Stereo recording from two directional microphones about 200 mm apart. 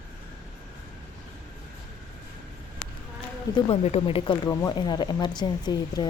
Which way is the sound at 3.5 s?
30° left (ahead or behind).